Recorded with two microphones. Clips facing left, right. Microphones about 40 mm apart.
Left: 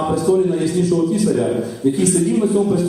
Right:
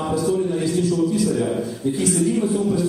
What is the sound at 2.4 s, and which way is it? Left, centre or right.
Speech, centre.